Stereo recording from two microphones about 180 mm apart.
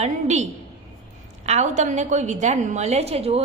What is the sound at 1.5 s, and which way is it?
A woman's voice, 40° right (ahead or behind).